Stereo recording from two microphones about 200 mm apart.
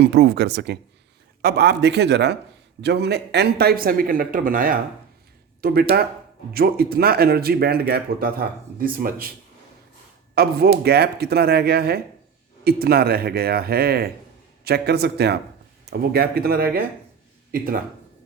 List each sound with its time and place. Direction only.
0.0 s a man's voice: 55° right (ahead or behind)
10.3 s speech: 50° right (ahead or behind)